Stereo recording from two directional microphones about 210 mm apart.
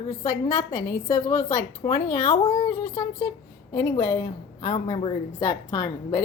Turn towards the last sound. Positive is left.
turn(degrees=15)  # may be behind; listen again after turning